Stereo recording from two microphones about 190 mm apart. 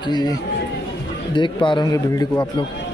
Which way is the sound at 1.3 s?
25° left (ahead or behind).